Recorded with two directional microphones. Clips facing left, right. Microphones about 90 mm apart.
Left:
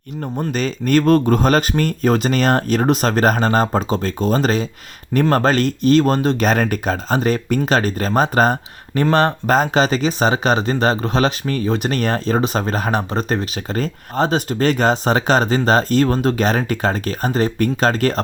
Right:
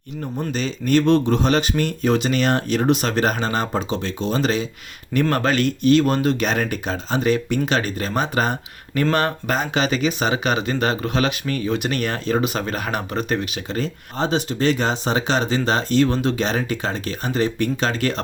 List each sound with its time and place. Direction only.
0.3 s speech: 50° left (ahead or behind)